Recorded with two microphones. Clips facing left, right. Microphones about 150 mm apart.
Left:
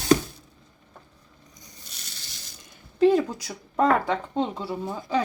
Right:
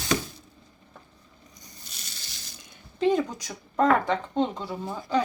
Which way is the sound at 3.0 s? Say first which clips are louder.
Left 4 dB; 5° left (ahead or behind).